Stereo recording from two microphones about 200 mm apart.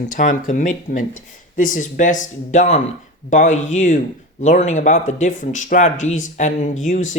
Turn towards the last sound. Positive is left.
turn(degrees=40)  # may be behind; listen again after turning